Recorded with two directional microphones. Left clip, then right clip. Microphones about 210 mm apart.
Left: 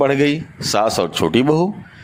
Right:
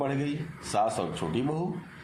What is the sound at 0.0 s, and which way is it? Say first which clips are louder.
A man's voice: left 15 dB; 45° left (ahead or behind).